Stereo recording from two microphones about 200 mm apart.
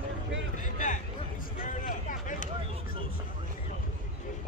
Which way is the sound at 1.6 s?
40° left (ahead or behind).